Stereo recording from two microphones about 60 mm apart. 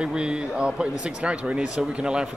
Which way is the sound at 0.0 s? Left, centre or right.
Centre.